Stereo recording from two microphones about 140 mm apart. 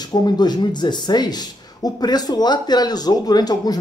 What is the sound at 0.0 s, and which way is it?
Speech, 30° left (ahead or behind).